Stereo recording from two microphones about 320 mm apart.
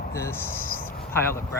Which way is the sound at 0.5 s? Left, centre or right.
Left.